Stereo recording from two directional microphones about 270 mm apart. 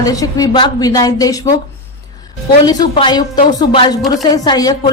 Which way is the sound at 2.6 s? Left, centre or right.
Centre.